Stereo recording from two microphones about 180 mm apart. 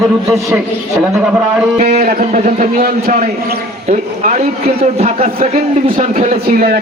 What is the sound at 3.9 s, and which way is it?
A man's voice, 40° right (ahead or behind).